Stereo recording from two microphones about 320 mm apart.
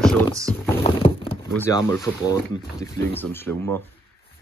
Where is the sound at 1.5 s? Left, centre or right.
Centre.